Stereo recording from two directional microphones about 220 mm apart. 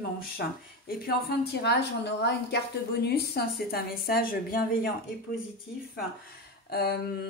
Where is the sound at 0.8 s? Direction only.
45° left (ahead or behind).